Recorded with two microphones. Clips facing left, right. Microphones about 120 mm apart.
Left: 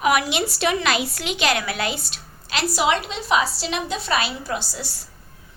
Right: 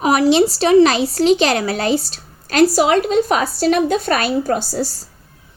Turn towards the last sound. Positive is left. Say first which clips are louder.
# right 9 dB
turn(degrees=-40)  # may be behind; listen again after turning